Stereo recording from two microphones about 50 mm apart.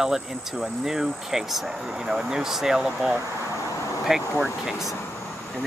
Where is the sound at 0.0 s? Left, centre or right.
Centre.